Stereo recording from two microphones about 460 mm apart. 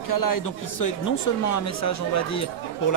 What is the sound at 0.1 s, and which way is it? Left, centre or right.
A man's voice, left.